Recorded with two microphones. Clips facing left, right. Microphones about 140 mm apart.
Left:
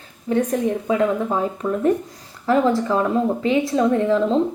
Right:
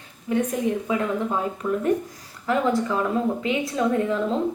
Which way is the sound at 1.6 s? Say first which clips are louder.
Even; 50° left (ahead or behind).